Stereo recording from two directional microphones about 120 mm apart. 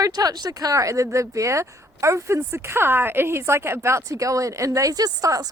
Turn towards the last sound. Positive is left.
turn(degrees=-30)  # may be behind; listen again after turning